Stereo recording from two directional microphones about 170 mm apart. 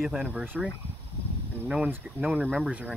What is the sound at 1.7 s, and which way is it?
Speech, 5° right (ahead or behind).